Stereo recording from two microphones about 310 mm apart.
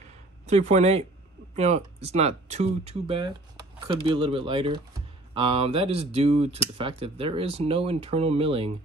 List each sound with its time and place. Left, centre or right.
0.6 s speech: right